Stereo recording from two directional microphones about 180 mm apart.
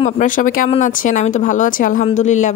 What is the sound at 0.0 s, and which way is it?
Speech, 45° left (ahead or behind).